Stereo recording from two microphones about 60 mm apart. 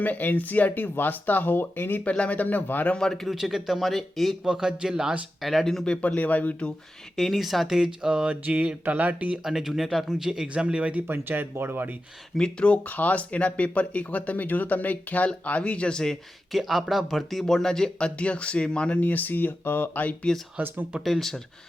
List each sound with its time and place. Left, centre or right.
0.0 s speech: left
2.0 s speech: left
2.9 s speech: centre
3.2 s speech: centre
4.4 s speech: centre
5.4 s speech: centre
5.8 s speech: centre
7.2 s speech: centre; by 9.4 s right
9.4 s speech: centre
11.1 s speech: right
12.4 s speech: centre
16.5 s speech: centre; by 20.1 s left
20.6 s speech: right
21.0 s speech: centre